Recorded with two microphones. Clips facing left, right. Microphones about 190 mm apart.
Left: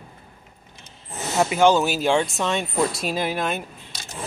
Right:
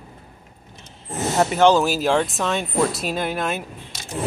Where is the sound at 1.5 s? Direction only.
Centre (ahead or behind).